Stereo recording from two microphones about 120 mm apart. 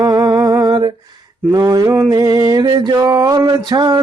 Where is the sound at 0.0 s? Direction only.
35° right (ahead or behind).